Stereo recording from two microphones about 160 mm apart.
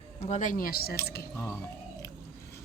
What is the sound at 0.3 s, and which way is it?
Speech, 50° left (ahead or behind).